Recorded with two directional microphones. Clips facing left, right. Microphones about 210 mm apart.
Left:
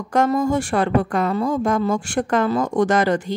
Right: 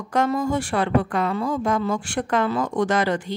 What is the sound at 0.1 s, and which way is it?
A woman's voice, 45° left (ahead or behind).